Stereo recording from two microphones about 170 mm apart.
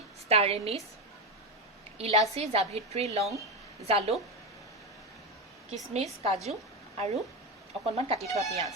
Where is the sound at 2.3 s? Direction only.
40° right (ahead or behind).